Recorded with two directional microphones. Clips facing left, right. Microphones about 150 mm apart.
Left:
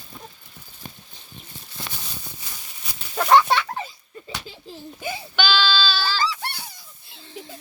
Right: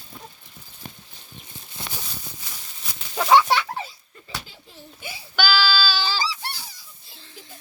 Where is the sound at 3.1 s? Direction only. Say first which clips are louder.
Even; centre (ahead or behind).